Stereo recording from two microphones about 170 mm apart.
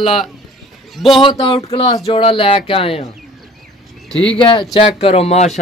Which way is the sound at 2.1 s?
30° left (ahead or behind).